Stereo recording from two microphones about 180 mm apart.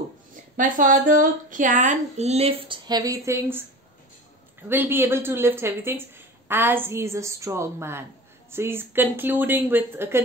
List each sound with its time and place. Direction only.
0.6 s speech: 45° right (ahead or behind); by 3.6 s 10° right (ahead or behind)
4.6 s speech: 10° right (ahead or behind)